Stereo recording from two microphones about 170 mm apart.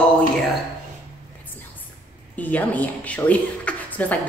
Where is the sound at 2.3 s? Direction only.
10° left (ahead or behind).